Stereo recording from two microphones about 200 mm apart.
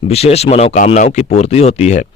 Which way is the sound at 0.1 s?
30° left (ahead or behind).